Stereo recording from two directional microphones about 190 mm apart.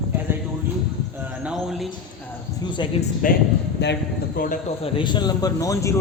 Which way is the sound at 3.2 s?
45° left (ahead or behind).